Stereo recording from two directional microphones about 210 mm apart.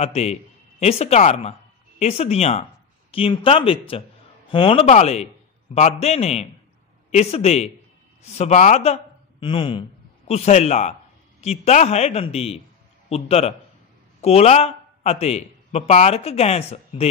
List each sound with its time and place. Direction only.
0.0 s a man's voice: 30° left (ahead or behind)